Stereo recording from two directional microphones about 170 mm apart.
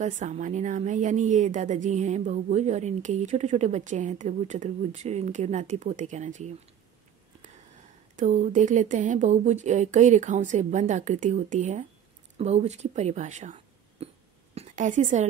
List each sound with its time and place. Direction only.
0.0 s speech: 45° right (ahead or behind)
7.7 s a woman's voice: 45° right (ahead or behind)